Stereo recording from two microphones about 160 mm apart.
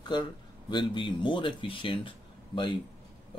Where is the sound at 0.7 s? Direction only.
30° left (ahead or behind).